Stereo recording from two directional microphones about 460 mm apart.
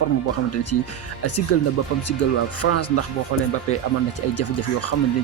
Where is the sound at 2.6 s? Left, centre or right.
Left.